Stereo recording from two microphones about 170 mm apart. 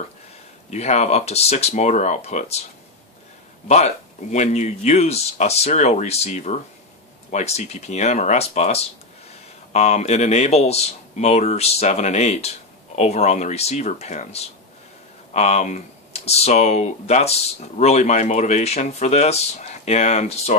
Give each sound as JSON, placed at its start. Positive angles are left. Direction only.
{"t": 0.7, "sound": "speech", "side_deg": 40}
{"t": 3.6, "sound": "speech", "side_deg": 40}